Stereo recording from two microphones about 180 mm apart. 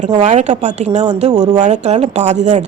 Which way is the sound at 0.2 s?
40° right (ahead or behind).